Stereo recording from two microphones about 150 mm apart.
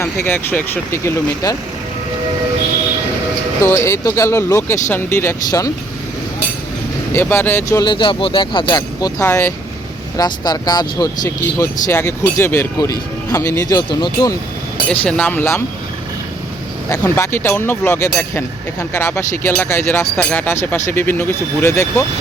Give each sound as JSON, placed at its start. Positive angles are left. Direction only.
{"t": 0.0, "sound": "speech", "side_deg": 15}
{"t": 3.6, "sound": "speech", "side_deg": 20}
{"t": 7.1, "sound": "speech", "side_deg": 15}
{"t": 14.8, "sound": "speech", "side_deg": 10}
{"t": 16.9, "sound": "speech", "side_deg": 15}